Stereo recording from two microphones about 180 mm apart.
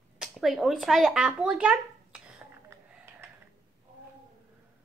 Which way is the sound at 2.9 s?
15° right (ahead or behind).